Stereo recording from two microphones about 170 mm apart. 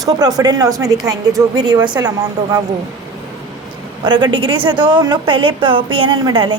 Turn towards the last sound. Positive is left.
turn(degrees=-25)  # may be behind; listen again after turning